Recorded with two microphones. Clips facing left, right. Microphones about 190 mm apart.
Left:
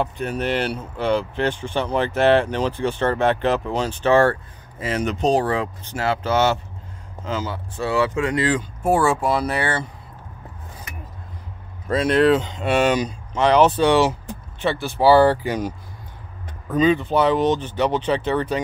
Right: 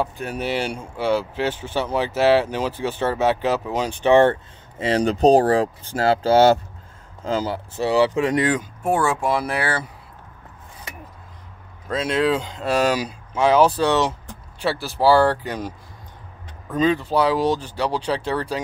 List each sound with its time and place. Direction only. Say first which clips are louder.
0.0 s speech: left 2 dB; 5° right (ahead or behind)
8.8 s speech: left 2 dB; 5° left (ahead or behind)
11.9 s speech: left 4 dB; centre (ahead or behind)
16.7 s speech: left 2 dB; centre (ahead or behind)